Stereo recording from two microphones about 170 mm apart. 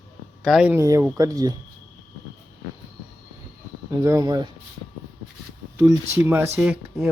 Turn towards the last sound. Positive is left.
turn(degrees=-10)  # may be behind; listen again after turning